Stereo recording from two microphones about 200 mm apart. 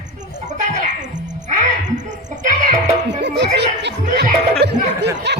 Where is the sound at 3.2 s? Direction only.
55° right (ahead or behind).